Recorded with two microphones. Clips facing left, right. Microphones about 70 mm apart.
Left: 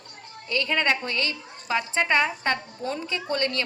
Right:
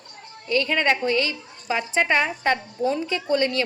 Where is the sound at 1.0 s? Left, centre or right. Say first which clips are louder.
Right 6 dB; right.